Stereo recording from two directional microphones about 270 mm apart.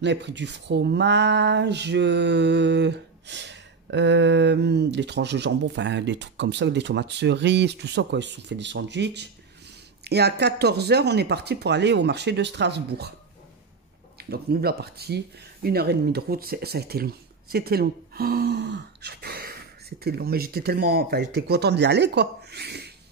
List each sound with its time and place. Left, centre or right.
0.0 s speech: right
14.1 s speech: right